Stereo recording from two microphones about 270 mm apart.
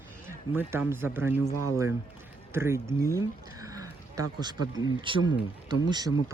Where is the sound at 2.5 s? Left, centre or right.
Centre.